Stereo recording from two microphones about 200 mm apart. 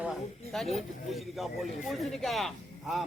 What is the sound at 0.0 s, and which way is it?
A man's voice, centre (ahead or behind).